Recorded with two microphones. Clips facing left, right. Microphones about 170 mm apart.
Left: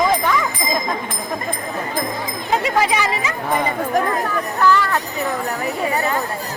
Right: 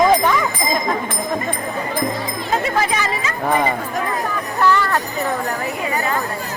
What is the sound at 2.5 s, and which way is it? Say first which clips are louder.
Speech: left 2 dB; 15° left (ahead or behind).